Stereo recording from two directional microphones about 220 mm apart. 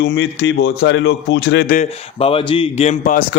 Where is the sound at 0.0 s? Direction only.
50° left (ahead or behind).